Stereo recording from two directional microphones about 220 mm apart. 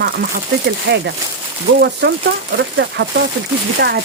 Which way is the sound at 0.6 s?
50° right (ahead or behind).